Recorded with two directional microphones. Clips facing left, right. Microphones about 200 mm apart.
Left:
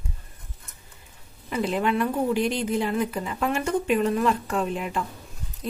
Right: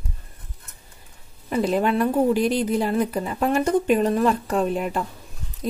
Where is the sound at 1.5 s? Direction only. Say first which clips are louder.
Right 4 dB; 40° right (ahead or behind).